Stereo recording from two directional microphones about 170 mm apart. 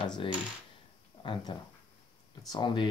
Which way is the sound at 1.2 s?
30° left (ahead or behind).